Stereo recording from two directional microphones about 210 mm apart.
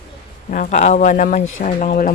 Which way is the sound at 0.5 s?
35° left (ahead or behind).